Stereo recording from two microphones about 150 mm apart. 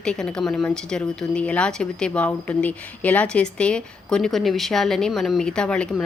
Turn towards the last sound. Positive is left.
turn(degrees=5)  # may be behind; listen again after turning